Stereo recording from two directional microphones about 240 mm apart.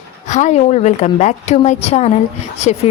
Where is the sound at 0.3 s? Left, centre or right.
Left.